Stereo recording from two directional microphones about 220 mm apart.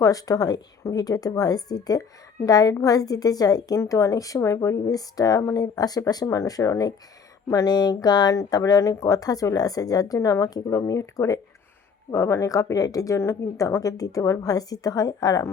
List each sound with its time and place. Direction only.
0.0 s a woman's voice: 15° left (ahead or behind)